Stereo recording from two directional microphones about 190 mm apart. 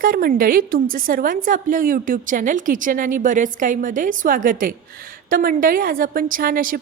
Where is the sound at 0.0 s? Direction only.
50° right (ahead or behind).